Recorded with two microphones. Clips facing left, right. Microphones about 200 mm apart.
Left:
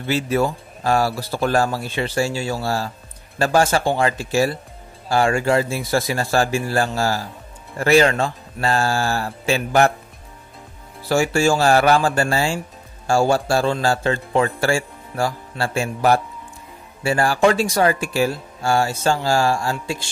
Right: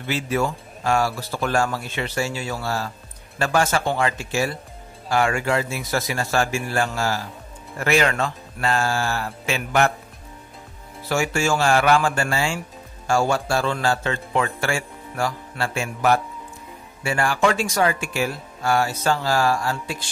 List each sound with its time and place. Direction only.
0.0 s speech: 35° left (ahead or behind)
11.1 s speech: 35° left (ahead or behind)